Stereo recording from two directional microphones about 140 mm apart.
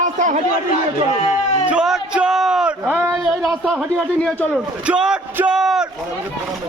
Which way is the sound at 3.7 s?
5° right (ahead or behind).